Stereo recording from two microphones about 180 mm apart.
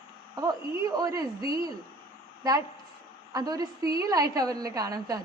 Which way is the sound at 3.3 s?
20° right (ahead or behind).